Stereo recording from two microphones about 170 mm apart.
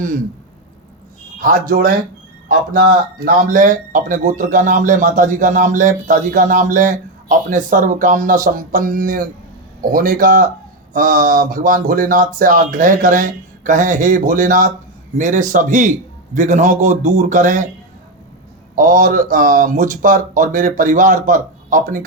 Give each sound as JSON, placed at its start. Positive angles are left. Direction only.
{"t": 1.4, "sound": "a man's voice", "side_deg": -55}
{"t": 18.8, "sound": "speech", "side_deg": -55}